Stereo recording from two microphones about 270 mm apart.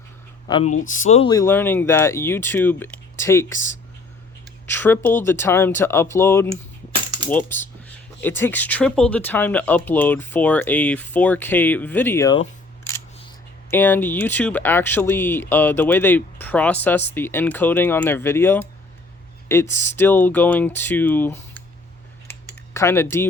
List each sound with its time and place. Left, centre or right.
0.4 s speech: left
4.6 s speech: centre
22.3 s computer keyboard: centre